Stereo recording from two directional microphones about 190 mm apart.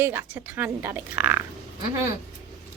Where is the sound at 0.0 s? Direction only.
10° right (ahead or behind).